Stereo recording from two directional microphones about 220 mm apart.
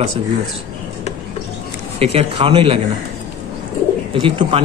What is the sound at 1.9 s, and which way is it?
Speech, 30° right (ahead or behind).